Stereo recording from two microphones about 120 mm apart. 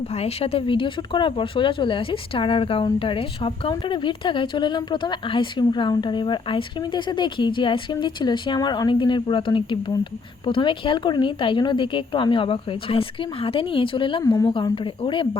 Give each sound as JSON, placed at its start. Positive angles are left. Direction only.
{"t": 0.1, "sound": "a woman's voice", "side_deg": 60}
{"t": 14.3, "sound": "a woman's voice", "side_deg": 30}
{"t": 14.5, "sound": "a woman's voice", "side_deg": 45}